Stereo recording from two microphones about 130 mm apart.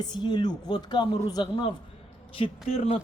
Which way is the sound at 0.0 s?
35° left (ahead or behind).